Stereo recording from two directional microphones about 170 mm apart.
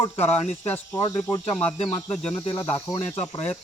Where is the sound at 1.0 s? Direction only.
25° left (ahead or behind).